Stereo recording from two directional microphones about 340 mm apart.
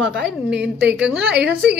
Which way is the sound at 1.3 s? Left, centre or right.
Right.